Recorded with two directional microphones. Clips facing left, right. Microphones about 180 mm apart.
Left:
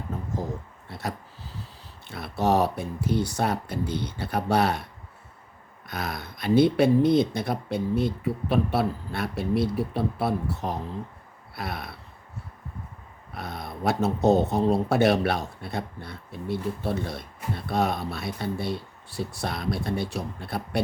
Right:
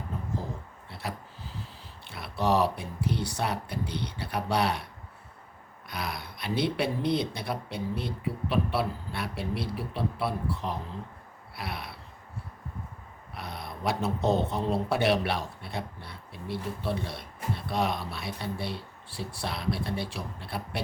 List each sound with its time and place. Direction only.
0.9 s a sound: 45° left (ahead or behind)
2.0 s speech: 45° left (ahead or behind)
5.9 s speech: 45° left (ahead or behind)
13.3 s speech: 45° left (ahead or behind)